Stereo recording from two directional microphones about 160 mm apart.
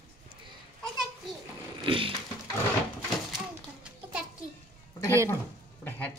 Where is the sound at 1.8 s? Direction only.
35° right (ahead or behind).